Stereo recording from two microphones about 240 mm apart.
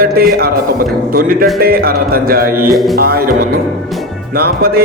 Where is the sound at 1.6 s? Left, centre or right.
Right.